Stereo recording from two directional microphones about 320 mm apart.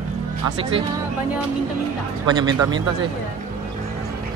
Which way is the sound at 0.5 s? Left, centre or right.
Centre.